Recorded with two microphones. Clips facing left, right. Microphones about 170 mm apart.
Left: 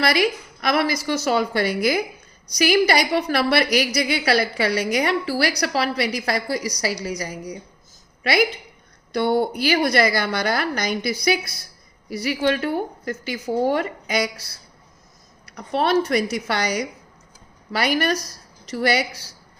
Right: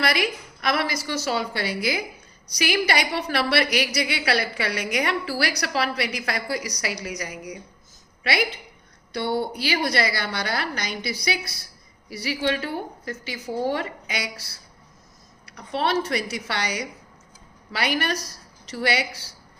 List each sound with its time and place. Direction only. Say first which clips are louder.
0.0 s a woman's voice: left 4 dB; 40° left (ahead or behind)
8.2 s a woman's voice: left 5 dB; 45° left (ahead or behind)
15.4 s a woman's voice: left 4 dB; 45° left (ahead or behind)